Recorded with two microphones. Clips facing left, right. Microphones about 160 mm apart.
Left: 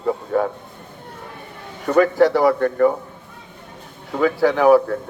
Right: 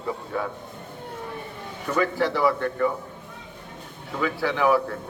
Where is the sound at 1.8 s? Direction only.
50° left (ahead or behind).